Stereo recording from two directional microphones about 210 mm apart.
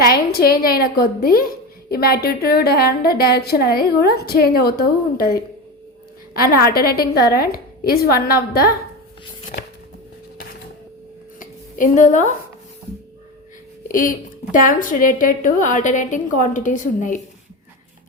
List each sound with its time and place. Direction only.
0.0 s a woman's voice: 45° left (ahead or behind)
11.3 s a sound: 40° left (ahead or behind)
13.8 s a woman's voice: 40° left (ahead or behind)